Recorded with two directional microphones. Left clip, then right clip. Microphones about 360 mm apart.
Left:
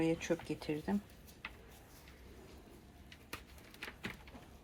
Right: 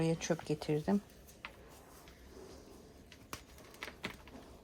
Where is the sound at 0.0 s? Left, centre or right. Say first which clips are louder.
Even; right.